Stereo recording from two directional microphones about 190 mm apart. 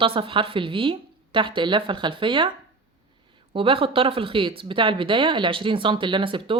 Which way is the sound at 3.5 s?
30° right (ahead or behind).